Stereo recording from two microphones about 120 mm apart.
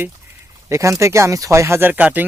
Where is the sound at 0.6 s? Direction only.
25° right (ahead or behind).